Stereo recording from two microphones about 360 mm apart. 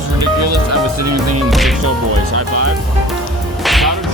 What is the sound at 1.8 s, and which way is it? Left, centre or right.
Speech, right.